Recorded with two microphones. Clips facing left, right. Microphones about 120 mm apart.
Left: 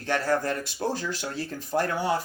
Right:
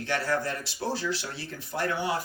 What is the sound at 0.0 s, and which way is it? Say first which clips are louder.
Speech: left 3 dB; 45° left (ahead or behind).